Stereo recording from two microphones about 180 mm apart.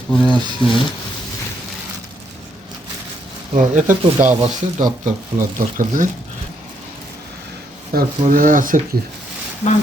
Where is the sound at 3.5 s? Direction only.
45° right (ahead or behind).